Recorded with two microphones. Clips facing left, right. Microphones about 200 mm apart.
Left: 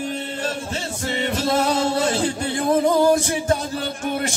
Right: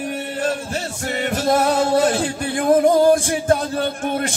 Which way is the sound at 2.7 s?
50° right (ahead or behind).